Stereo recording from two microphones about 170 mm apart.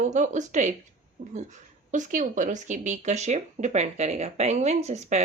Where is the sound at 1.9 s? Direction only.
50° right (ahead or behind).